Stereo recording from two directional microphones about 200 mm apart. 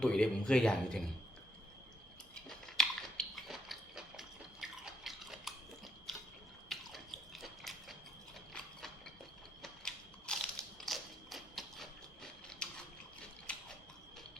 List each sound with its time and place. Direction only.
0.0 s speech: 5° left (ahead or behind)
2.3 s biting: 5° left (ahead or behind)
6.7 s drip: centre (ahead or behind)
9.6 s mechanisms: centre (ahead or behind)